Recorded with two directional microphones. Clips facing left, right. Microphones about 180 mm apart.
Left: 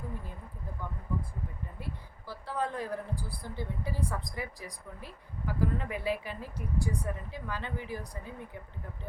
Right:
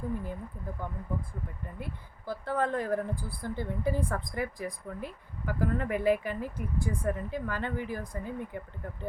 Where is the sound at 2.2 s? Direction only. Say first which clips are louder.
Right 4 dB; 50° right (ahead or behind).